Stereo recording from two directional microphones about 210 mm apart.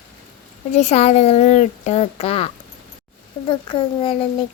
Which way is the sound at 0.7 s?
30° left (ahead or behind).